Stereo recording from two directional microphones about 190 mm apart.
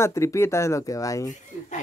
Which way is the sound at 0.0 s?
15° left (ahead or behind).